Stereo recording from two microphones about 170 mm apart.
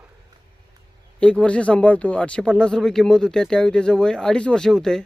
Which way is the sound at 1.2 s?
5° left (ahead or behind).